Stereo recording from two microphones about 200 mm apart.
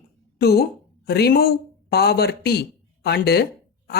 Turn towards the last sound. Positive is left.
turn(degrees=55)  # may be behind; listen again after turning